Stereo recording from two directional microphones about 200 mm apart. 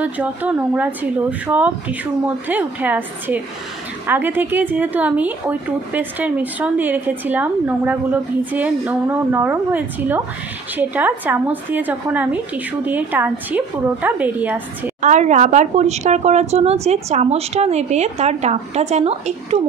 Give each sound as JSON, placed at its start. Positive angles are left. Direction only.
{"t": 0.0, "sound": "a woman's voice", "side_deg": -5}
{"t": 15.0, "sound": "speech", "side_deg": -35}